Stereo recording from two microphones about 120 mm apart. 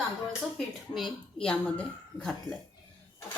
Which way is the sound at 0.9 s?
5° left (ahead or behind).